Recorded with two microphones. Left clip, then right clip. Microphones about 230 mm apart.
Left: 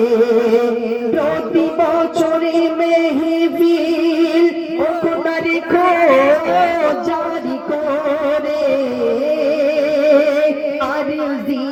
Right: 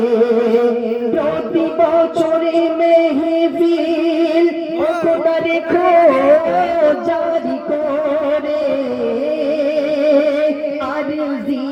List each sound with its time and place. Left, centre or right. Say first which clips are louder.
0.1 s music: even; left
5.8 s music: right 1 dB; left
10.0 s music: left 1 dB; left